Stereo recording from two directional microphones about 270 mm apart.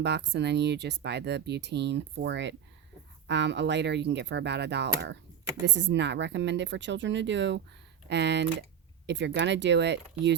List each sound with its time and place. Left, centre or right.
0.0 s speech: right